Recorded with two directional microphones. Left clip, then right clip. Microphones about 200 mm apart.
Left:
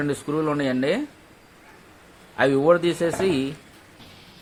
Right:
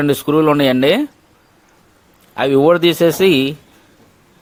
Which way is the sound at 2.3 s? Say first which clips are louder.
Right 6 dB; 50° right (ahead or behind).